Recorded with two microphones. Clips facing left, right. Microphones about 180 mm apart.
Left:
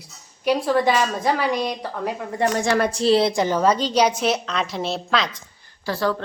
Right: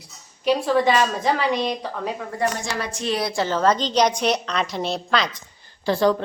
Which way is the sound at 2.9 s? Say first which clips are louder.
Left 6 dB; 30° left (ahead or behind).